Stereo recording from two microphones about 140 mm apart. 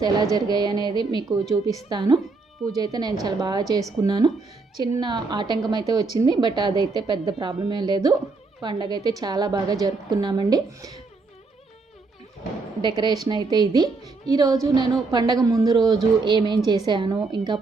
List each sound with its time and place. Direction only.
0.0 s a woman's voice: 30° right (ahead or behind)
12.8 s a woman's voice: 30° right (ahead or behind)